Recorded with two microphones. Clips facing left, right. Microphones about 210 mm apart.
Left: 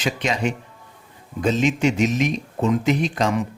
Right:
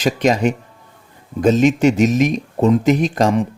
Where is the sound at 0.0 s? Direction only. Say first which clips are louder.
Right 7 dB; 40° right (ahead or behind).